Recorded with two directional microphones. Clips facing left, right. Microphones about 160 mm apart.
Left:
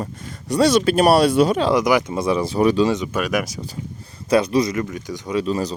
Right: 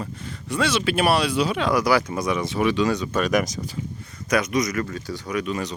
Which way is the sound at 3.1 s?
10° left (ahead or behind).